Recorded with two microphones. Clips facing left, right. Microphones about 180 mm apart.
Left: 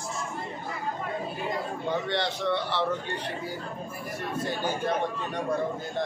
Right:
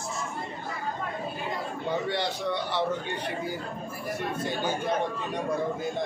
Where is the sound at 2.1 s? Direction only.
10° right (ahead or behind).